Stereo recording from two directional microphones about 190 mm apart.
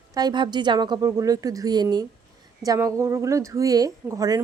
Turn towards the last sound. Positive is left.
turn(degrees=-15)  # may be behind; listen again after turning